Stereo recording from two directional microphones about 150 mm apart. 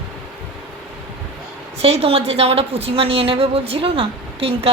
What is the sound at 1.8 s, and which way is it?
A woman's voice, 40° right (ahead or behind).